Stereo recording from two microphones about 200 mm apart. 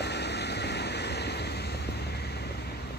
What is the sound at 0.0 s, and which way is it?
Vehicle, 55° left (ahead or behind).